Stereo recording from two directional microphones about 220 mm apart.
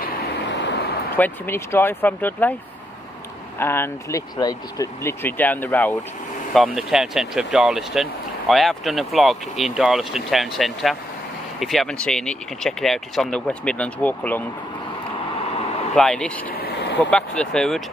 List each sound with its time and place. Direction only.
0.4 s vehicle: 55° left (ahead or behind)
1.1 s speech: 10° left (ahead or behind)
3.5 s speech: 10° left (ahead or behind)
15.9 s speech: 5° left (ahead or behind)
16.5 s vehicle: 45° left (ahead or behind)
17.4 s speech: 5° left (ahead or behind)